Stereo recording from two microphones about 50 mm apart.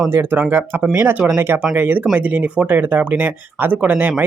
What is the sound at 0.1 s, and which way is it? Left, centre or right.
Speech, right.